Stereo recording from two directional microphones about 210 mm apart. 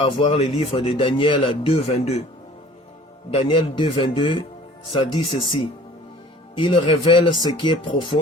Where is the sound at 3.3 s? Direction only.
25° left (ahead or behind).